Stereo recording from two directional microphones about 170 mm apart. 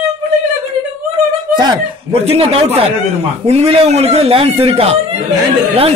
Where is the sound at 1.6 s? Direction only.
30° right (ahead or behind).